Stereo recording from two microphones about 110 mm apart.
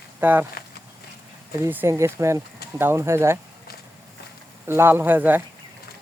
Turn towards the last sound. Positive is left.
turn(degrees=-15)  # may be behind; listen again after turning